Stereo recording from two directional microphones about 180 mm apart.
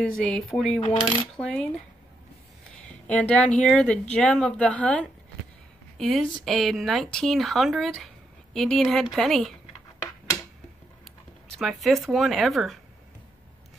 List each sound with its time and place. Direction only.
0.0 s speech: 5° left (ahead or behind)
0.7 s coin: 30° left (ahead or behind)
1.3 s speech: 5° left (ahead or behind)
3.1 s speech: 5° left (ahead or behind)
11.5 s speech: centre (ahead or behind)